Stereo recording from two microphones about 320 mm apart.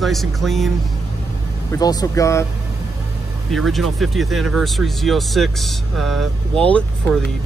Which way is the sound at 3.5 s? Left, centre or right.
Centre.